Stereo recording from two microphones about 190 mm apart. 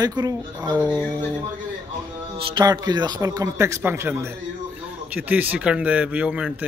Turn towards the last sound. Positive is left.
turn(degrees=-5)  # may be behind; listen again after turning